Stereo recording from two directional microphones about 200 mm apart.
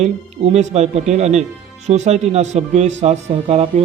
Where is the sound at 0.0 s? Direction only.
35° right (ahead or behind).